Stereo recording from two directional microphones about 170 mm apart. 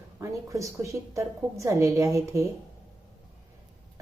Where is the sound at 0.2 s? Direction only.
20° right (ahead or behind).